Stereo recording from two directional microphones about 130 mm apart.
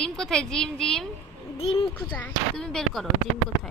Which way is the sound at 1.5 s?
50° left (ahead or behind).